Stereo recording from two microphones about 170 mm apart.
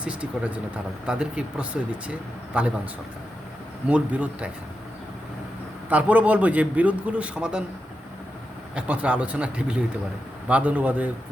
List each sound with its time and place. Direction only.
0.0 s speech: 5° right (ahead or behind)
3.8 s speech: 10° right (ahead or behind)
5.9 s speech: 10° right (ahead or behind)
8.7 s speech: 5° right (ahead or behind)